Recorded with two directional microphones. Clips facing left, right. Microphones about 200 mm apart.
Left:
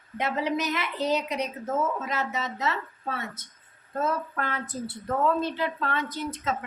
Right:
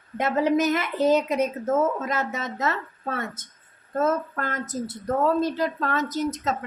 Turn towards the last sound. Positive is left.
turn(degrees=-40)  # may be behind; listen again after turning